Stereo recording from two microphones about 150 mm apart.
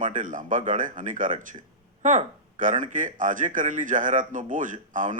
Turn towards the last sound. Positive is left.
turn(degrees=-55)  # may be behind; listen again after turning